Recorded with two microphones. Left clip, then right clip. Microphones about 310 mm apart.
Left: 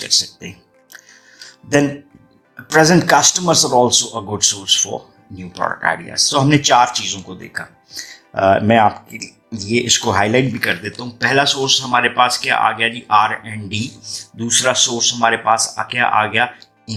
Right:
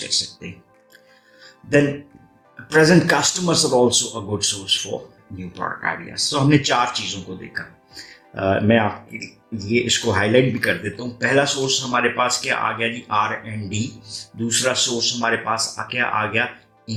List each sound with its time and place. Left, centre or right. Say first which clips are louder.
2.6 s speech: left 3 dB; left